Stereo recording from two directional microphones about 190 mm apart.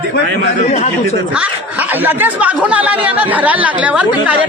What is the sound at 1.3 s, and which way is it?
Speech, 10° right (ahead or behind).